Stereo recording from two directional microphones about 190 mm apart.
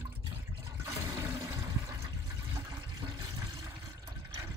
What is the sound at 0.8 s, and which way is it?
Toilet flush, 15° right (ahead or behind).